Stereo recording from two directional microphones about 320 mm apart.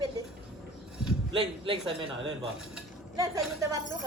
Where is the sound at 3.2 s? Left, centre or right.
Centre.